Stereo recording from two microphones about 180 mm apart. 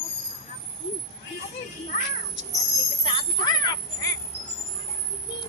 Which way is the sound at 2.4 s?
90° right.